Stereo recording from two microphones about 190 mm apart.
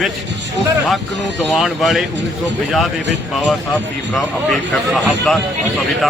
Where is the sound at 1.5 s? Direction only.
Centre (ahead or behind).